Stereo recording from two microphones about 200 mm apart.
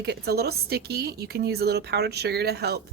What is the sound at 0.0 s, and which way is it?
Speech, 55° right (ahead or behind).